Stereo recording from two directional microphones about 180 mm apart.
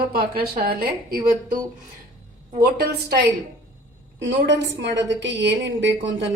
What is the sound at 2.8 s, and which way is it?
Speech, 65° right (ahead or behind).